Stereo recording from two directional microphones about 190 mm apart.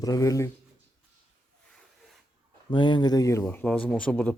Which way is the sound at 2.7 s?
25° left (ahead or behind).